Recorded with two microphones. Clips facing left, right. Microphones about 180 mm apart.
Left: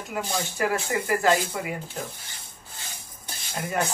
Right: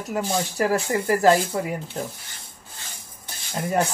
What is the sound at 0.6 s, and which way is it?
Speech, 35° right (ahead or behind).